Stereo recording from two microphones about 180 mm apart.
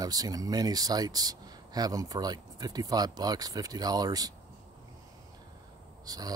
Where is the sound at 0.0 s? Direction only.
20° right (ahead or behind).